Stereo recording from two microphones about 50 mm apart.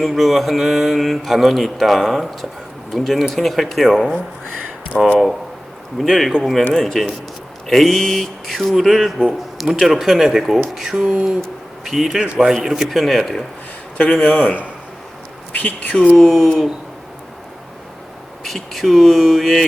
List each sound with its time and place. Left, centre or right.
0.0 s speech: centre
4.9 s a man's voice: centre
6.0 s a man's voice: centre
11.0 s speech: centre
11.9 s a man's voice: centre
12.2 s speech: right
12.6 s a man's voice: centre
12.9 s speech: centre
14.0 s speech: centre
15.5 s speech: left
16.1 s speech: centre
18.4 s speech: centre